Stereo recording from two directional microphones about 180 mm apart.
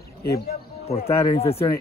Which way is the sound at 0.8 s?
35° left (ahead or behind).